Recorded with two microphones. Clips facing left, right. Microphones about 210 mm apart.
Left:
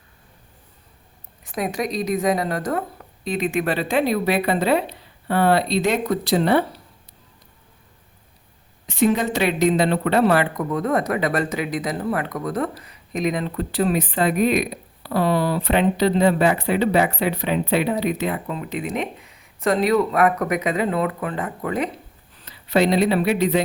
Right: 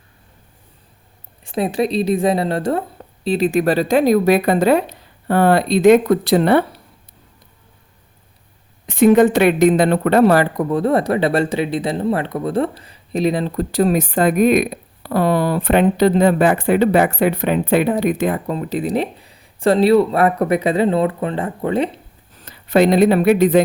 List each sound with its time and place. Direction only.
1.5 s a woman's voice: 30° right (ahead or behind); by 6.7 s 60° right (ahead or behind)
8.9 s a man's voice: 55° right (ahead or behind); by 22.0 s 30° right (ahead or behind)
22.4 s speech: 50° right (ahead or behind)